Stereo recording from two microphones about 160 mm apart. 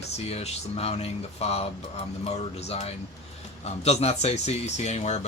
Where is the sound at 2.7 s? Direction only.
40° left (ahead or behind).